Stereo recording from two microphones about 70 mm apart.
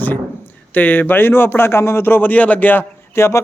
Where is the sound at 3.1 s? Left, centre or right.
Left.